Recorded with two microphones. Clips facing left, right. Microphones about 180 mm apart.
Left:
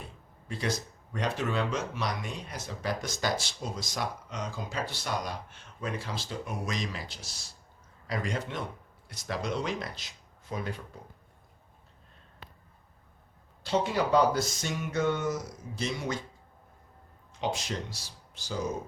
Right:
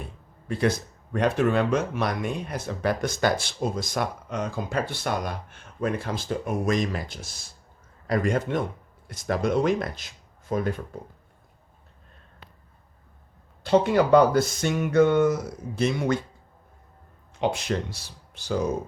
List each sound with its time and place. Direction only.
0.4 s speech: 55° right (ahead or behind)
13.7 s speech: 60° right (ahead or behind)
17.4 s speech: 60° right (ahead or behind)